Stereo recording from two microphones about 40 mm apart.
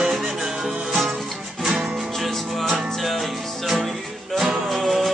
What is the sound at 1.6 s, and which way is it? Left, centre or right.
Music, centre.